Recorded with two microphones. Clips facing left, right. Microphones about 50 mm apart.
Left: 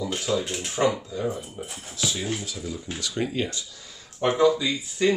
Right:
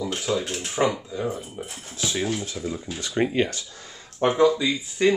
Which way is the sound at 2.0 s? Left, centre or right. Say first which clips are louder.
Right 3 dB; right.